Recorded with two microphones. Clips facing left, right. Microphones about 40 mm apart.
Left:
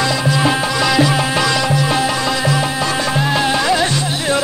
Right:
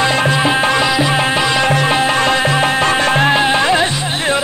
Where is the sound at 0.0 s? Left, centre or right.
Right.